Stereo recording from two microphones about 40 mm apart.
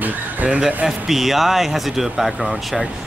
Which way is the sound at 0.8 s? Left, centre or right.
Centre.